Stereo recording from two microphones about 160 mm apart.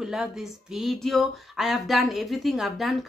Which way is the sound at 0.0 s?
5° right (ahead or behind).